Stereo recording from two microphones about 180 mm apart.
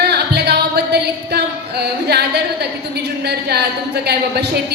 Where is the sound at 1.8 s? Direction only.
65° right (ahead or behind).